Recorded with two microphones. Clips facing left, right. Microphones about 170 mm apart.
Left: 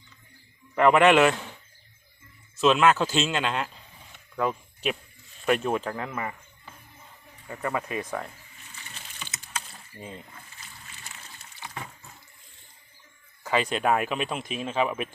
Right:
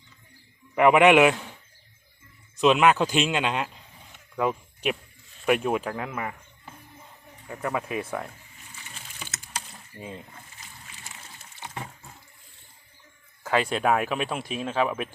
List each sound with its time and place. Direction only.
0.8 s speech: 10° right (ahead or behind)
2.6 s speech: 15° right (ahead or behind)
4.4 s a sound: 5° right (ahead or behind)
5.5 s speech: 5° right (ahead or behind)
7.4 s speech: 5° right (ahead or behind)
8.7 s a sound: 10° right (ahead or behind)
10.0 s speech: 15° right (ahead or behind)
11.6 s a sound: 25° right (ahead or behind)
13.6 s speech: 5° right (ahead or behind)
14.7 s speech: 10° left (ahead or behind)